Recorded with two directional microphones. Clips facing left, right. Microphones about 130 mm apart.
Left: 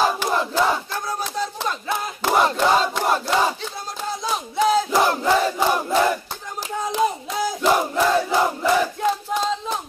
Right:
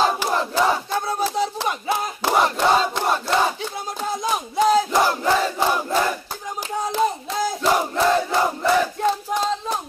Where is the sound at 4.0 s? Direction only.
10° right (ahead or behind).